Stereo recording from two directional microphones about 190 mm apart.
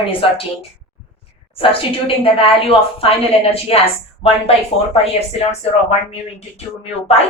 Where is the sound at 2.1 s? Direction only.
30° left (ahead or behind).